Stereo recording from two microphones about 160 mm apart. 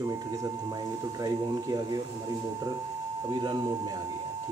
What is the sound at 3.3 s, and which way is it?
Speech, 25° right (ahead or behind).